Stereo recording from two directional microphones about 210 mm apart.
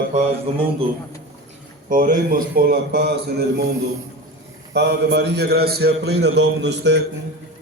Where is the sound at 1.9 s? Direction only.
40° right (ahead or behind).